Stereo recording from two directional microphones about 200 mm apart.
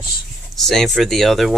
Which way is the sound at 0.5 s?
Centre (ahead or behind).